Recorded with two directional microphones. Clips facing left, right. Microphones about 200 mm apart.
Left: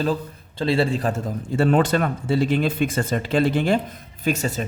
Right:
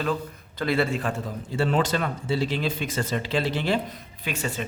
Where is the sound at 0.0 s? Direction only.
30° left (ahead or behind).